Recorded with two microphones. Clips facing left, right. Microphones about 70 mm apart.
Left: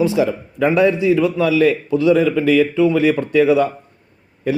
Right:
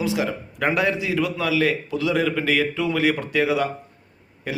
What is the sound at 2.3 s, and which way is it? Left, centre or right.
Speech, right.